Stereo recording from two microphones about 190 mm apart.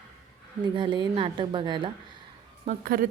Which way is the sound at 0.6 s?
25° right (ahead or behind).